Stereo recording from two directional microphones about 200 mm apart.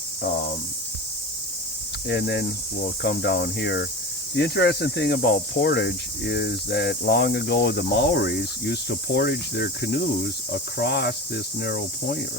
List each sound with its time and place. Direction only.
2.0 s cricket: 55° left (ahead or behind)